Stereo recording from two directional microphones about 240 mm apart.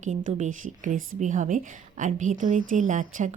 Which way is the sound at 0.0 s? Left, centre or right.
Right.